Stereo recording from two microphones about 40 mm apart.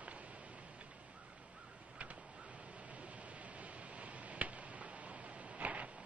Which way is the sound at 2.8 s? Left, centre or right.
Right.